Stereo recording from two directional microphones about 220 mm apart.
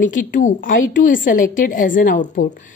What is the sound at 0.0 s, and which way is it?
A woman's voice, 35° left (ahead or behind).